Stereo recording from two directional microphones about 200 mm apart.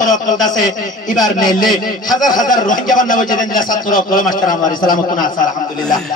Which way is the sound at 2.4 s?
40° left (ahead or behind).